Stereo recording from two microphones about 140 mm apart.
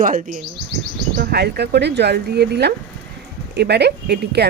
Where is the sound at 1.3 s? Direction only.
90° right.